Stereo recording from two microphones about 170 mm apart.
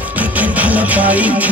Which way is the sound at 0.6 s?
10° right (ahead or behind).